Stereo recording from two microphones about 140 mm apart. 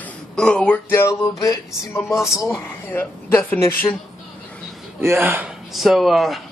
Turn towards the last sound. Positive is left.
turn(degrees=0)  # may be behind; listen again after turning